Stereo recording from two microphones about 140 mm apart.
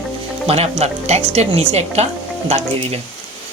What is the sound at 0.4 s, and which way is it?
Speech, 45° right (ahead or behind).